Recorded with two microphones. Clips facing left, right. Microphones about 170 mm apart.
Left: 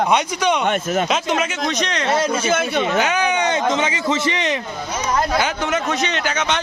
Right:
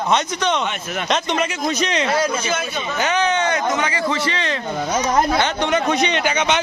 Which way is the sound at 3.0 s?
10° left (ahead or behind).